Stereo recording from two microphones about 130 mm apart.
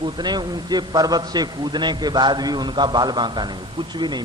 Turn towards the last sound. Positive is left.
turn(degrees=-35)  # may be behind; listen again after turning